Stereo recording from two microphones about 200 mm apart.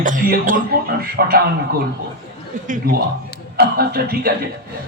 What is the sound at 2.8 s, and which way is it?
Speech, 45° right (ahead or behind).